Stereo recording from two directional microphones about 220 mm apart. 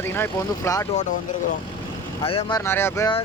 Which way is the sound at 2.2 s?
25° left (ahead or behind).